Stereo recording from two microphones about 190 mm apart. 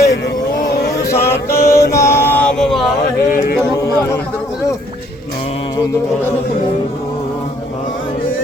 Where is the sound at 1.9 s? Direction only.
15° left (ahead or behind).